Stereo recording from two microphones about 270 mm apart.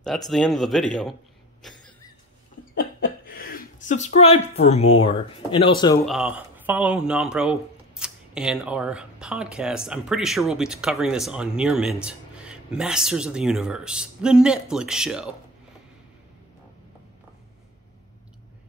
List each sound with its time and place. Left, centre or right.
0.3 s speech: centre
1.6 s a sound: centre
2.7 s speech: left; by 5.9 s centre
6.0 s speech: centre